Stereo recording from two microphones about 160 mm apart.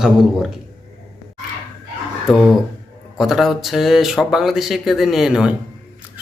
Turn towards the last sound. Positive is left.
turn(degrees=-5)  # may be behind; listen again after turning